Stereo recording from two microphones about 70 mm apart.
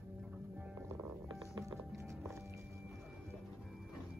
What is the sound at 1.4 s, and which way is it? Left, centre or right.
Music, right.